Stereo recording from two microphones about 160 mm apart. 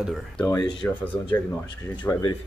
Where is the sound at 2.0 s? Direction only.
15° left (ahead or behind).